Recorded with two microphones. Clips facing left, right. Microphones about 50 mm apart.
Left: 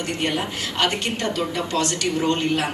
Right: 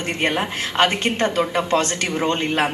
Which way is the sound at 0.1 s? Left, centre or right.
Right.